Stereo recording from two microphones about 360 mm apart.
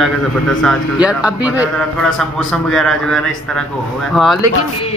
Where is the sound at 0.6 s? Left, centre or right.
Centre.